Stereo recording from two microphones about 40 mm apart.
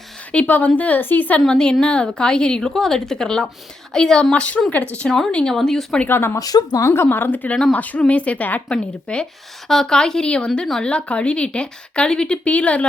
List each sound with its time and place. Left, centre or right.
0.3 s a woman's voice: left
1.5 s a woman's voice: left
2.7 s a woman's voice: centre
4.7 s a woman's voice: left
5.0 s speech: centre
6.1 s a woman's voice: left
7.8 s a woman's voice: left
8.7 s a woman's voice: left
9.6 s a woman's voice: centre
12.5 s a woman's voice: left